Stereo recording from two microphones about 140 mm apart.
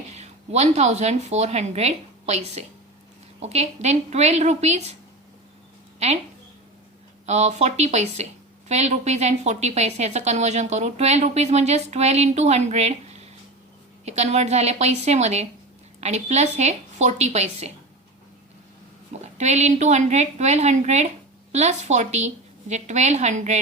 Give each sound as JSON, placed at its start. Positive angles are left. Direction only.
{"t": 0.1, "sound": "a woman's voice", "side_deg": -50}
{"t": 7.3, "sound": "a woman's voice", "side_deg": -55}
{"t": 19.1, "sound": "a woman's voice", "side_deg": -55}